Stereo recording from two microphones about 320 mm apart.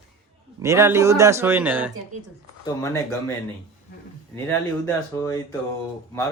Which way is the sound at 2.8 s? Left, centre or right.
Centre.